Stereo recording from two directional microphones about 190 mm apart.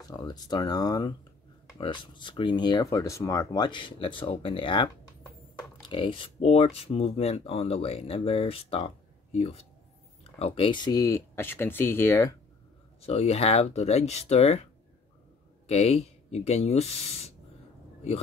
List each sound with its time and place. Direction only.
0.0 s speech: 20° left (ahead or behind)
13.0 s speech: 35° left (ahead or behind)